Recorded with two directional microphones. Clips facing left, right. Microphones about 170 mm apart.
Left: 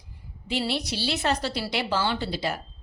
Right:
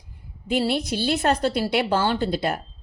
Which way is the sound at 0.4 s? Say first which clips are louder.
Right 5 dB; 50° right (ahead or behind).